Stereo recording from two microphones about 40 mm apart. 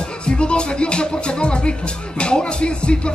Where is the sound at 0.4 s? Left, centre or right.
Left.